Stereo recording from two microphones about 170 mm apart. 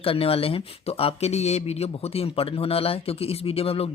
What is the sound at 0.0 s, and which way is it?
Speech, 35° left (ahead or behind).